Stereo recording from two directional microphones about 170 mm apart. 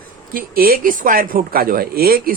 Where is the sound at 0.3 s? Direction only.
60° right (ahead or behind).